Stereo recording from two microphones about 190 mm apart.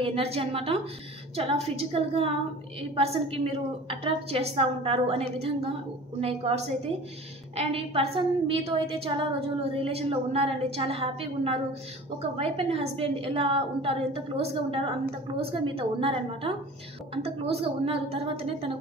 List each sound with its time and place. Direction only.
0.0 s a woman's voice: 30° right (ahead or behind)